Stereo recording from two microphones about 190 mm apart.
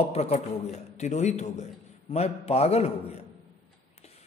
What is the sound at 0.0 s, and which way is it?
Speech, 35° left (ahead or behind).